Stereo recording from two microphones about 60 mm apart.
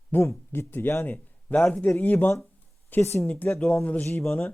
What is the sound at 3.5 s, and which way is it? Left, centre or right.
Speech, centre.